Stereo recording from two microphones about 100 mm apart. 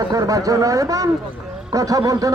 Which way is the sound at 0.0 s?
40° right (ahead or behind).